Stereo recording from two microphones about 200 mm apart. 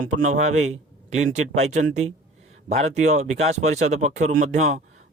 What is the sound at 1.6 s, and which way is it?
Speech, 35° right (ahead or behind).